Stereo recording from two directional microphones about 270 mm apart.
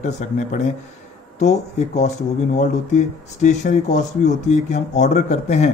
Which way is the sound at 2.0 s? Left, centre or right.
Left.